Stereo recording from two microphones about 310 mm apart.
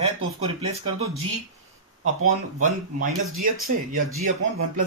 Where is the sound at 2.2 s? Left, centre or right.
Right.